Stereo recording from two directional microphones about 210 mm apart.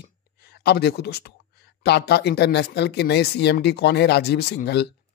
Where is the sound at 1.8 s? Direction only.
50° left (ahead or behind).